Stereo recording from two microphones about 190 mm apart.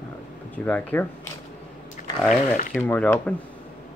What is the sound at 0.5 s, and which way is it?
Speech, 10° left (ahead or behind).